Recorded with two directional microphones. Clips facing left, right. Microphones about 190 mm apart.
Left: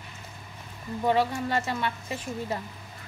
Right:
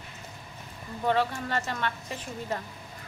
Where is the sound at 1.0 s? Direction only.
10° left (ahead or behind).